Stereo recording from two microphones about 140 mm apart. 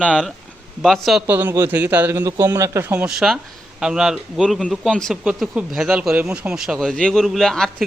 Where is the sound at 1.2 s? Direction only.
15° right (ahead or behind).